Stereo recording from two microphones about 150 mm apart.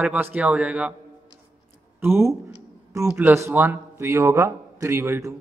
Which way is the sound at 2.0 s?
15° right (ahead or behind).